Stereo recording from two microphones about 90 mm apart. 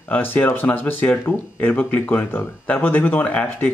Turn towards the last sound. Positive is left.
turn(degrees=15)  # may be behind; listen again after turning